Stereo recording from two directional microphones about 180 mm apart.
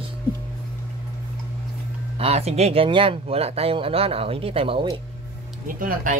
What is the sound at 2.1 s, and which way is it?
Speech, 35° right (ahead or behind).